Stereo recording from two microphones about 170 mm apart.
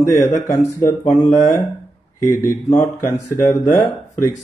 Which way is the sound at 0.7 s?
20° left (ahead or behind).